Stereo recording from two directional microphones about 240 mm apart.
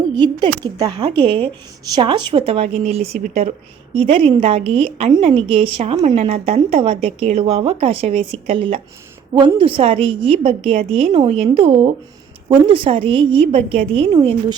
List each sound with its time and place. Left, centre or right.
0.1 s a woman's voice: centre